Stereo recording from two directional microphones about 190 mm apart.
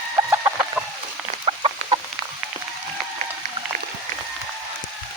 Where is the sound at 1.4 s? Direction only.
30° right (ahead or behind).